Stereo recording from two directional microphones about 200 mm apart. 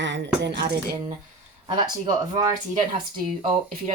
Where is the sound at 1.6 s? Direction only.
20° right (ahead or behind).